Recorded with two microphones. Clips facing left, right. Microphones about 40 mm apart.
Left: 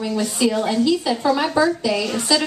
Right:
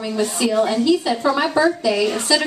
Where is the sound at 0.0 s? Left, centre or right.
Centre.